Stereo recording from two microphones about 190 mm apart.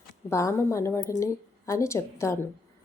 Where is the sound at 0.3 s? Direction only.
15° left (ahead or behind).